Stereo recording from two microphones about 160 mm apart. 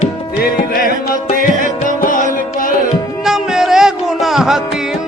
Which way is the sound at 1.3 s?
60° left (ahead or behind).